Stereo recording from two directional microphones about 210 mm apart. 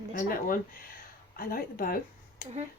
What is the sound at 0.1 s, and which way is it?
Speech, 40° left (ahead or behind).